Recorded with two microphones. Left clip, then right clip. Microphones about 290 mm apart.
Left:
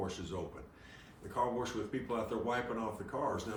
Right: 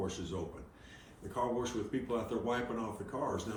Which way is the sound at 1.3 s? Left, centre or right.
Centre.